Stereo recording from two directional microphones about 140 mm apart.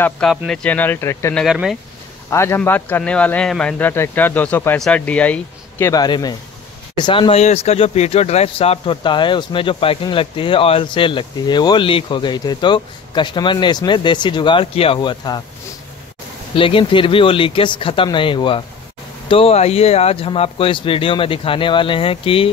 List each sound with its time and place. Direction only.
0.5 s speech: 10° left (ahead or behind)
1.3 s speech: centre (ahead or behind)
2.2 s speech: 20° left (ahead or behind)
5.9 s speech: 30° left (ahead or behind)
16.5 s speech: 40° left (ahead or behind)